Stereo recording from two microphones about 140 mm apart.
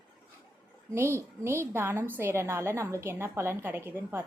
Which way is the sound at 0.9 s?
20° right (ahead or behind).